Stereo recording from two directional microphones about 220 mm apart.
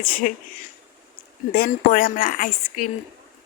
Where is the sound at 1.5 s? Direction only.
40° left (ahead or behind).